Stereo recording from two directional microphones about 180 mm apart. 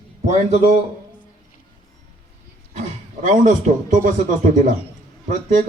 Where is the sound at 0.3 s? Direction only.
40° right (ahead or behind).